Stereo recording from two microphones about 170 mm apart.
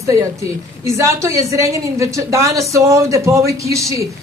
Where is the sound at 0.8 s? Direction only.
15° right (ahead or behind).